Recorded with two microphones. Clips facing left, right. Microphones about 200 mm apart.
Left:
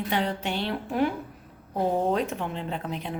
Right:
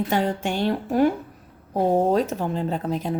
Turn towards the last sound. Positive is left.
turn(degrees=-40)  # may be behind; listen again after turning